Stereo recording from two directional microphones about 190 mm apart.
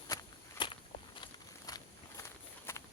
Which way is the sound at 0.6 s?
25° left (ahead or behind).